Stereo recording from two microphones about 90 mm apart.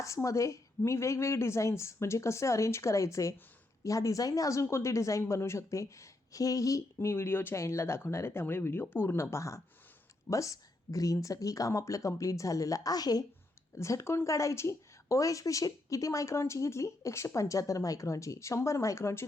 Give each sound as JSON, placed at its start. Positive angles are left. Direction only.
{"t": 0.0, "sound": "a woman's voice", "side_deg": 35}
{"t": 13.7, "sound": "a woman's voice", "side_deg": 30}